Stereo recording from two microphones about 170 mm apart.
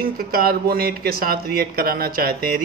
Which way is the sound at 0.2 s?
60° right (ahead or behind).